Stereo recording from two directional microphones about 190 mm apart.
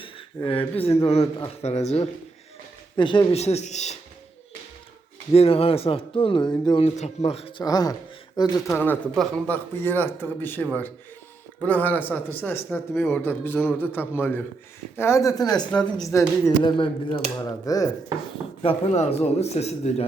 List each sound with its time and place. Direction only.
0.0 s a man's voice: 30° left (ahead or behind)
2.9 s a man's voice: 25° left (ahead or behind)
5.3 s a man's voice: 30° left (ahead or behind)
7.6 s speech: 20° left (ahead or behind)
18.6 s a man's voice: 30° left (ahead or behind)